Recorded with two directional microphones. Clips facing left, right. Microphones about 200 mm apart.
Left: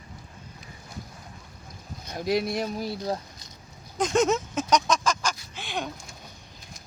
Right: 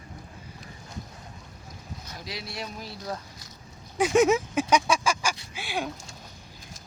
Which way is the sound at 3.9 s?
10° right (ahead or behind).